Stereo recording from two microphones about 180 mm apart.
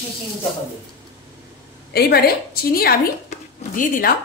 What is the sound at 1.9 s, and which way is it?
A woman's voice, 60° left (ahead or behind).